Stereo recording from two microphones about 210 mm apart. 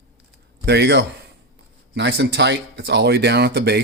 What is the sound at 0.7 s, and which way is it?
Speech, 50° right (ahead or behind).